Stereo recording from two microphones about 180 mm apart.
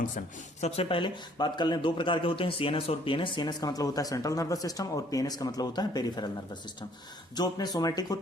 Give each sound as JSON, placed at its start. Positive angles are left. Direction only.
{"t": 0.2, "sound": "speech", "side_deg": 35}